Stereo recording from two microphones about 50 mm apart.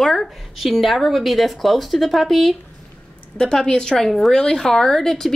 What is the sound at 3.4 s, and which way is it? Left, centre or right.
Speech, centre.